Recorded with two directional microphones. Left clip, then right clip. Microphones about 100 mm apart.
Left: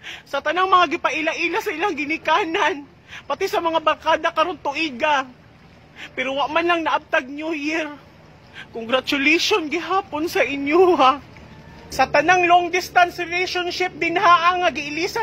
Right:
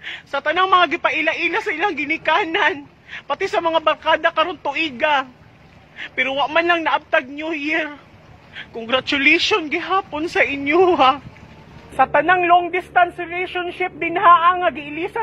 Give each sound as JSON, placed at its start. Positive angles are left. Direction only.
{"t": 0.0, "sound": "a man's voice", "side_deg": 30}